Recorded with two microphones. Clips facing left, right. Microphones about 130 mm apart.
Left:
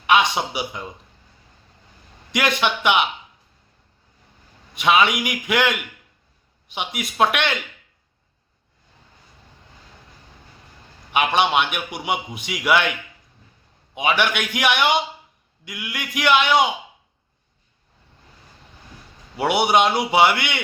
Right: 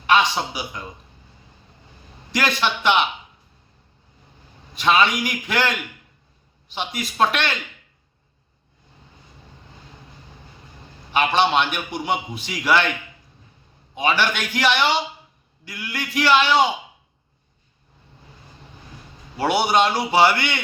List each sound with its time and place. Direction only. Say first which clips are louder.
0.1 s a man's voice: even; 15° left (ahead or behind)
2.6 s a man's voice: right 1 dB; 15° left (ahead or behind)
4.7 s a man's voice: left 1 dB; 15° left (ahead or behind)
11.1 s a man's voice: even; 15° left (ahead or behind)
13.9 s a man's voice: even; 15° left (ahead or behind)
19.5 s a man's voice: left 1 dB; 15° left (ahead or behind)